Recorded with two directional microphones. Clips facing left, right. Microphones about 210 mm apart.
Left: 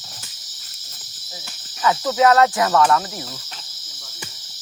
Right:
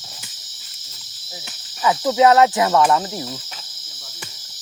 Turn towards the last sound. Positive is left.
turn(degrees=-5)  # may be behind; listen again after turning